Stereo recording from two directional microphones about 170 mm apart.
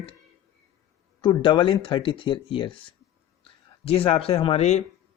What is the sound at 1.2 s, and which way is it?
Speech, 30° left (ahead or behind).